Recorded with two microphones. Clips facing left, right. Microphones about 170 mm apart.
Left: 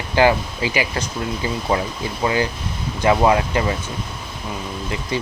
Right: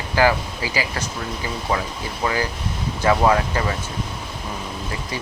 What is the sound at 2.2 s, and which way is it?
Speech, 25° left (ahead or behind).